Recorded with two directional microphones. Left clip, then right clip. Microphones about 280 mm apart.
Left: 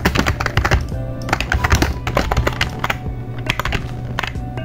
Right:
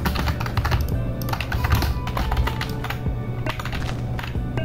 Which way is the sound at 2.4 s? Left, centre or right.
Left.